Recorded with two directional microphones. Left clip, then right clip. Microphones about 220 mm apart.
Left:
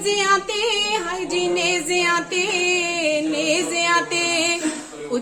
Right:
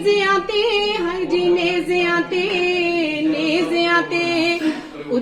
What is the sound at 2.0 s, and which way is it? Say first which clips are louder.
Music: right 1 dB; 20° left (ahead or behind).